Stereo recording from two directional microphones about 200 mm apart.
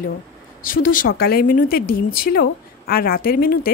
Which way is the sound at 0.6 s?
45° left (ahead or behind).